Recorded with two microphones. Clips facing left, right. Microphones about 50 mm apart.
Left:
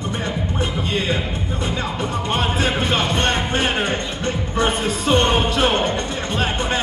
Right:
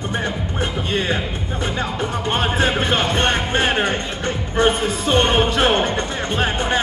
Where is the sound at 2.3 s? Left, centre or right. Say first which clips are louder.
Right 2 dB; right.